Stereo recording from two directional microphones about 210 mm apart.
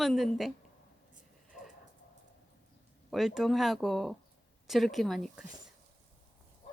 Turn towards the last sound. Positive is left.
turn(degrees=0)  # may be behind; listen again after turning